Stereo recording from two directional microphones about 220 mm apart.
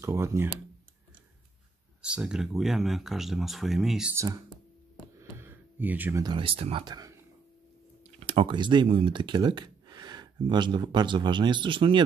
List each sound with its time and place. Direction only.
0.0 s speech: 10° right (ahead or behind)
2.0 s speech: 5° right (ahead or behind)
4.9 s a sound: 10° right (ahead or behind)
6.2 s speech: 25° right (ahead or behind)